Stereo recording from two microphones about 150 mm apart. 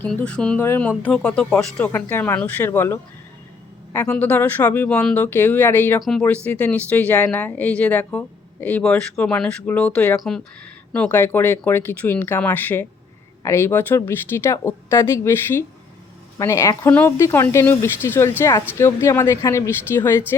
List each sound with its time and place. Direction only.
0.0 s speech: 10° left (ahead or behind)
6.0 s speech: centre (ahead or behind)